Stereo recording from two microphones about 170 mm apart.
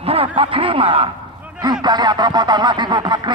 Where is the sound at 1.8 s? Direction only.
25° right (ahead or behind).